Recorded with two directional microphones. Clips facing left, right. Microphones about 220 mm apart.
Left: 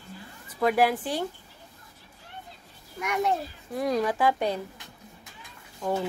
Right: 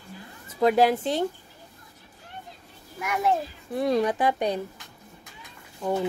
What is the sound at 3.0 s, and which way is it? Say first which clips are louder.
Speech: right 1 dB; 5° right (ahead or behind).